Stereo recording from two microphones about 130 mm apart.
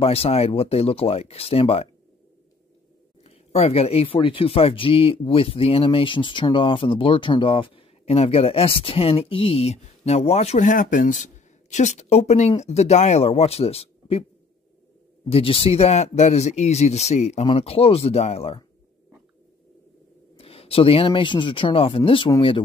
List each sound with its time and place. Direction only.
0.0 s speech: 50° left (ahead or behind)
3.3 s speech: 50° left (ahead or behind)
15.2 s speech: 45° left (ahead or behind)
20.3 s speech: 50° left (ahead or behind)